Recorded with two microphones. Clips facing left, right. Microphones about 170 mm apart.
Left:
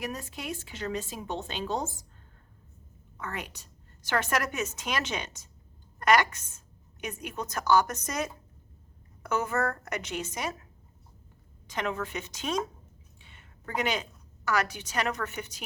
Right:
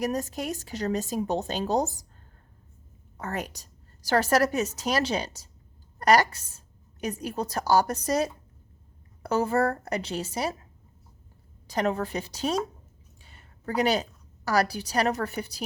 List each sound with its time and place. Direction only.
0.0 s a woman's voice: 40° right (ahead or behind)
3.2 s a woman's voice: 40° right (ahead or behind)
11.7 s a woman's voice: 35° right (ahead or behind)